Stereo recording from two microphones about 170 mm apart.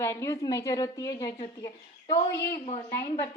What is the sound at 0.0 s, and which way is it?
A woman's voice, 15° left (ahead or behind).